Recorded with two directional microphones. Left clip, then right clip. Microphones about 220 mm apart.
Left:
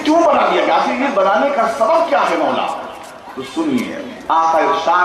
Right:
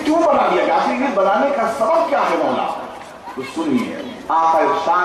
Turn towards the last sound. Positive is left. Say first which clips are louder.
# left 2 dB
turn(degrees=10)  # may be behind; listen again after turning